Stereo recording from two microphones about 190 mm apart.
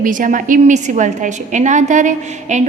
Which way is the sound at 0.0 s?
45° right (ahead or behind).